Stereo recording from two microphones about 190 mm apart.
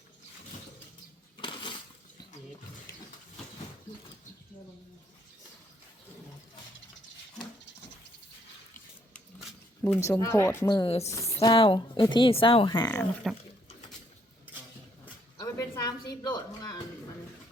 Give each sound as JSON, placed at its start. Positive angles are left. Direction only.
{"t": 1.4, "sound": "crushing", "side_deg": 25}
{"t": 9.8, "sound": "speech", "side_deg": 15}
{"t": 11.1, "sound": "a sound", "side_deg": 15}
{"t": 11.4, "sound": "speech", "side_deg": 25}
{"t": 13.2, "sound": "speech", "side_deg": 0}
{"t": 15.0, "sound": "a sound", "side_deg": 15}